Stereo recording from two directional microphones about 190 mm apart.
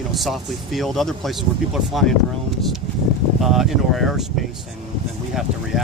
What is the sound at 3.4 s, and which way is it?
Speech, centre (ahead or behind).